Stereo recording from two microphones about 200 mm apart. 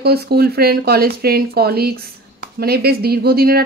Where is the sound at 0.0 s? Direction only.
50° right (ahead or behind).